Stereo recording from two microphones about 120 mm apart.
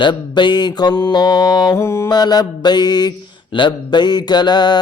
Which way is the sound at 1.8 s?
20° left (ahead or behind).